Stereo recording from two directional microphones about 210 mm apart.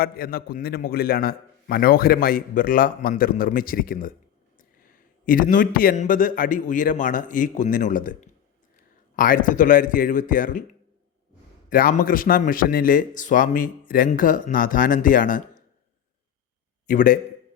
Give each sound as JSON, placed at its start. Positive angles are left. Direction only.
{"t": 0.0, "sound": "a man's voice", "side_deg": 45}
{"t": 11.7, "sound": "a man's voice", "side_deg": 40}
{"t": 16.8, "sound": "a man's voice", "side_deg": 40}